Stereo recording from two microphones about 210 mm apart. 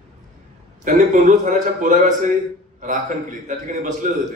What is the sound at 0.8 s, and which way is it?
A man's voice, 35° right (ahead or behind).